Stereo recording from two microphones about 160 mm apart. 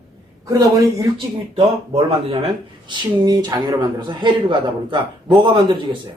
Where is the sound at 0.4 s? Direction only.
20° right (ahead or behind).